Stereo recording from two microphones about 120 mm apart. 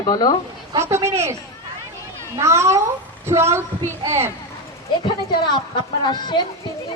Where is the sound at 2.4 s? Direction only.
25° right (ahead or behind).